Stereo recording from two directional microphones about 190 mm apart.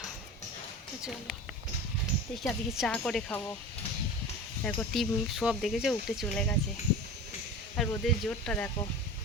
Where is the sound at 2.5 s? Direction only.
5° left (ahead or behind).